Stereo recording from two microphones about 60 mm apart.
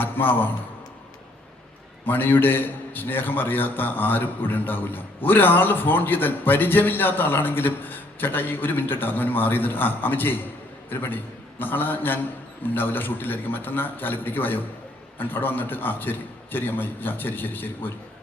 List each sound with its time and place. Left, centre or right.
0.0 s a man's voice: left
2.0 s a man's voice: left